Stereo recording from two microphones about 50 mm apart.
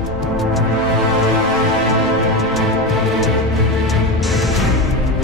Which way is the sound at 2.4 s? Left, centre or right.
Centre.